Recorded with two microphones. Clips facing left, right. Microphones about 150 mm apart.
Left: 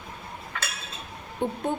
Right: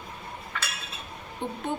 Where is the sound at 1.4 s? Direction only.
50° left (ahead or behind).